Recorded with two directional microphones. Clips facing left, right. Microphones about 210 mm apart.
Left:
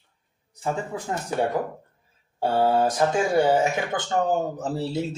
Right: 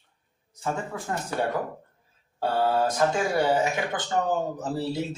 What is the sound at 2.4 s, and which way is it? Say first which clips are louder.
Speech: left 3 dB; 20° left (ahead or behind).